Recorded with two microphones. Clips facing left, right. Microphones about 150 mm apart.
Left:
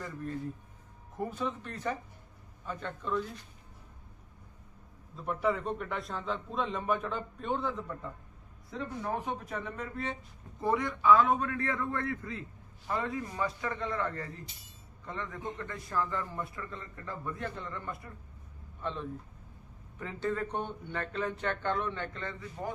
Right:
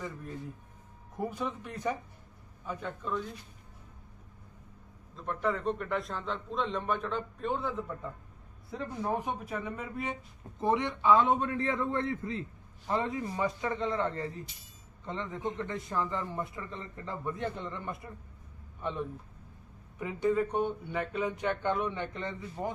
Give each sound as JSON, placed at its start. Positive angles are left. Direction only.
{"t": 1.1, "sound": "a man's voice", "side_deg": -10}
{"t": 5.1, "sound": "a man's voice", "side_deg": 10}
{"t": 9.1, "sound": "a man's voice", "side_deg": -10}